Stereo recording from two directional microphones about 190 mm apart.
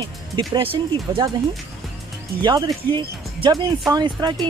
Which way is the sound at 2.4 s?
25° right (ahead or behind).